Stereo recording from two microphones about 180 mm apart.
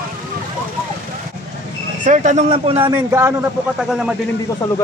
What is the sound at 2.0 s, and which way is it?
Speech, 45° right (ahead or behind).